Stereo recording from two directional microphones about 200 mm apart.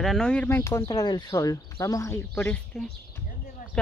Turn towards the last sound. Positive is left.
turn(degrees=5)  # may be behind; listen again after turning